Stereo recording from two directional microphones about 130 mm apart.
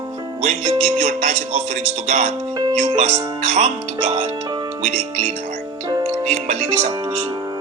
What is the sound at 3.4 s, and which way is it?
Speech, 60° right (ahead or behind).